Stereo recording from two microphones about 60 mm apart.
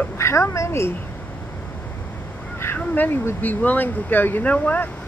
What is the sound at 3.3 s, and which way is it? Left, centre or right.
Speech, left.